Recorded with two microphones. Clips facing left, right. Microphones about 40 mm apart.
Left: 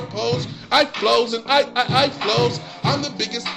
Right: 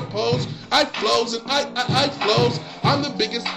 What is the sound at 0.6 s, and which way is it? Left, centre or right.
A man's voice, centre.